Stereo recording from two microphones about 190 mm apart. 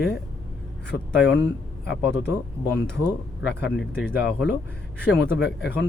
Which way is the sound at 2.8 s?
5° left (ahead or behind).